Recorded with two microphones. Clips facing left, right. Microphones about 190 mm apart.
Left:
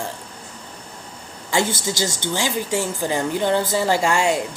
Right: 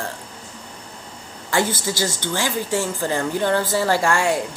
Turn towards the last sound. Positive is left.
turn(degrees=20)  # may be behind; listen again after turning